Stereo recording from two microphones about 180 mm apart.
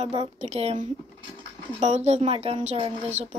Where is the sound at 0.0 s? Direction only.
35° right (ahead or behind).